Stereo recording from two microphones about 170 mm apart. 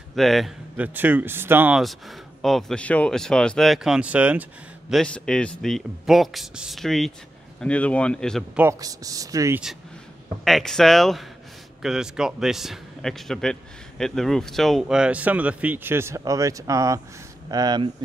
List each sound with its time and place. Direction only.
0.1 s speech: centre (ahead or behind)
1.8 s speech: centre (ahead or behind)
8.5 s speech: 15° right (ahead or behind)
10.4 s speech: centre (ahead or behind); by 17.8 s 25° right (ahead or behind)